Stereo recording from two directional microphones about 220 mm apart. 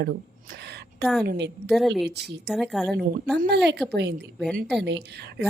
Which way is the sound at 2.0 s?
50° right (ahead or behind).